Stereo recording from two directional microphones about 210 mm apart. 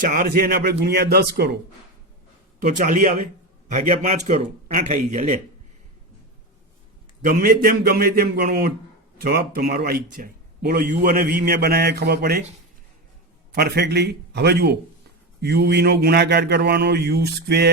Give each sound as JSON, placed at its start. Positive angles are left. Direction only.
{"t": 0.0, "sound": "speech", "side_deg": -40}
{"t": 2.6, "sound": "a man's voice", "side_deg": -40}
{"t": 7.3, "sound": "speech", "side_deg": -45}
{"t": 13.5, "sound": "speech", "side_deg": -50}